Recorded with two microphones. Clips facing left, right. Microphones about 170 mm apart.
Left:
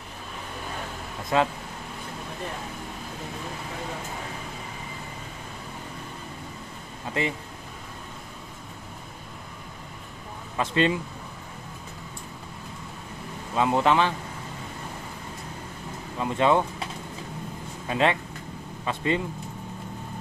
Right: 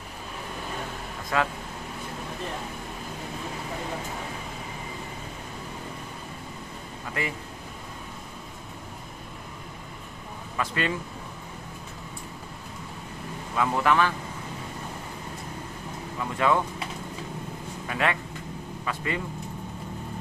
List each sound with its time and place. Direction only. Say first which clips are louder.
1.3 s speech: left 3 dB; 25° left (ahead or behind)
7.2 s speech: left 4 dB; 25° left (ahead or behind)
10.6 s speech: left 5 dB; 25° left (ahead or behind)
13.6 s speech: left 2 dB; 25° left (ahead or behind)
16.2 s speech: left 3 dB; 25° left (ahead or behind)
17.8 s speech: left 4 dB; 25° left (ahead or behind)